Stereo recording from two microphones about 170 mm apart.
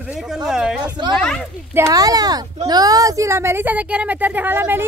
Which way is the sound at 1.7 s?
20° right (ahead or behind).